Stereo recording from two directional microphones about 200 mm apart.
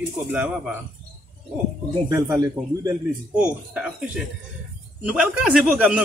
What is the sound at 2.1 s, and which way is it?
Speech, 15° right (ahead or behind).